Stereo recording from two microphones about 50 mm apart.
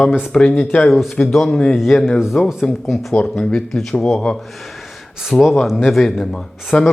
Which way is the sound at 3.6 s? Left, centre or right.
Centre.